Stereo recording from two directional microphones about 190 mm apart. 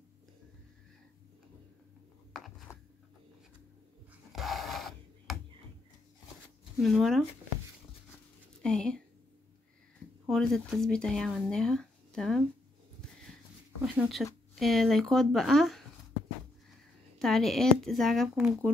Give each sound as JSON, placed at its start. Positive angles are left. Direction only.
{"t": 2.7, "sound": "a sound", "side_deg": 15}
{"t": 4.3, "sound": "a sound", "side_deg": 0}
{"t": 6.8, "sound": "speech", "side_deg": 0}
{"t": 8.6, "sound": "speech", "side_deg": 5}
{"t": 10.2, "sound": "speech", "side_deg": 0}
{"t": 13.9, "sound": "speech", "side_deg": 0}
{"t": 17.2, "sound": "speech", "side_deg": 0}